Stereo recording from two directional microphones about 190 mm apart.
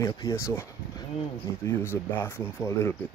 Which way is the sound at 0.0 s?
15° left (ahead or behind).